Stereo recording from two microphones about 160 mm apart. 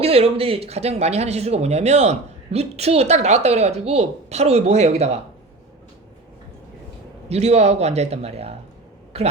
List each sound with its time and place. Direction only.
0.0 s speech: 40° right (ahead or behind)
7.3 s a man's voice: 40° right (ahead or behind)